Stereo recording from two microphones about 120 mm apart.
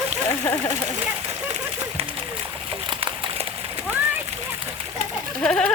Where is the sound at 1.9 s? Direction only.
50° right (ahead or behind).